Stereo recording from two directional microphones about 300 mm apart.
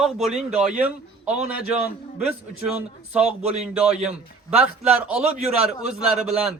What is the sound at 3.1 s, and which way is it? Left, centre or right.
A man's voice, centre.